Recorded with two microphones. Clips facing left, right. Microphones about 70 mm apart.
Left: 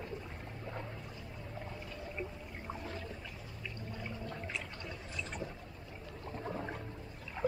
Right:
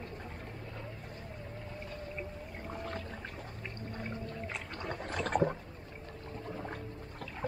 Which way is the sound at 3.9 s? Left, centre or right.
Right.